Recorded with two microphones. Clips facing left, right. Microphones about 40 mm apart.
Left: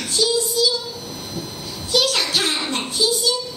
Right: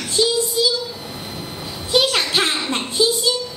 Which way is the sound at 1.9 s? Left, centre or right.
Right.